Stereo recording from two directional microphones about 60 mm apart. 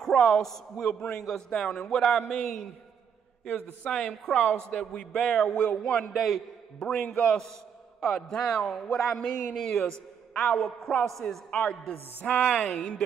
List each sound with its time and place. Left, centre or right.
0.0 s a man's voice: centre
3.4 s a man's voice: centre
6.1 s a man's voice: centre
6.8 s a man's voice: centre
11.1 s a man's voice: centre
11.5 s a man's voice: left
12.6 s a man's voice: centre